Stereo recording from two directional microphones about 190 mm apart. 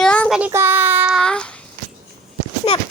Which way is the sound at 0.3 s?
10° right (ahead or behind).